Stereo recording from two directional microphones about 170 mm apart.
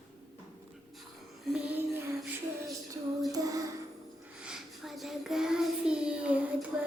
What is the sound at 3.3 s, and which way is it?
Child singing, 20° right (ahead or behind).